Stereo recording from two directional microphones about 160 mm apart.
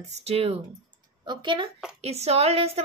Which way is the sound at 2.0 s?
40° right (ahead or behind).